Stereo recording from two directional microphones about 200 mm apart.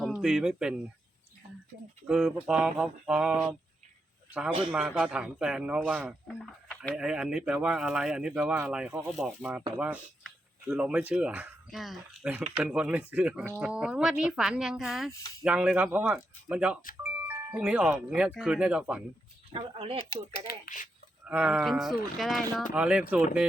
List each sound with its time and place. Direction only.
0.0 s speech: 5° right (ahead or behind)
2.0 s speech: 5° right (ahead or behind)
4.7 s speech: 5° right (ahead or behind)
19.5 s speech: 25° right (ahead or behind)
20.3 s speech: 40° left (ahead or behind)
21.2 s speech: 5° right (ahead or behind)